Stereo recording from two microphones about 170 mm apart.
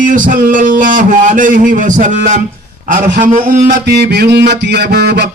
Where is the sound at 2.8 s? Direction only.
50° right (ahead or behind).